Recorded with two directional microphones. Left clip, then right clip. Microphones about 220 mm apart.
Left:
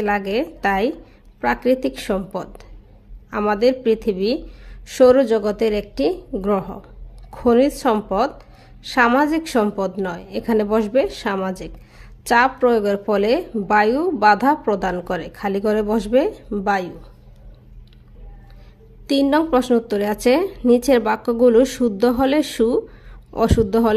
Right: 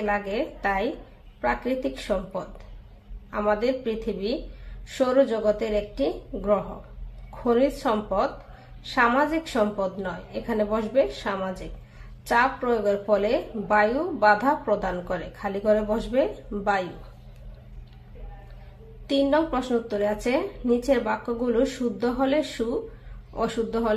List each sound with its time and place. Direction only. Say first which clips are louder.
0.0 s a woman's voice: left 6 dB; 45° left (ahead or behind)
19.0 s a woman's voice: left 5 dB; 45° left (ahead or behind)